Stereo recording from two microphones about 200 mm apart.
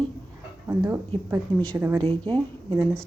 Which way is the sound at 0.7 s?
15° right (ahead or behind).